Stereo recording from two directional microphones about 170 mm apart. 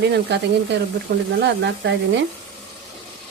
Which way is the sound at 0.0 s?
80° right.